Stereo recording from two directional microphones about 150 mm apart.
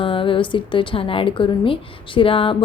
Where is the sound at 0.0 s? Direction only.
35° left (ahead or behind).